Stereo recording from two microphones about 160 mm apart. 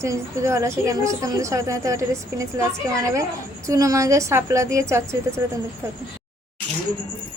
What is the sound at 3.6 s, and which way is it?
A woman's voice, 20° right (ahead or behind).